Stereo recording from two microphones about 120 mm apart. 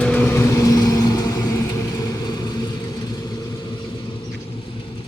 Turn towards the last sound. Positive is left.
turn(degrees=35)  # may be behind; listen again after turning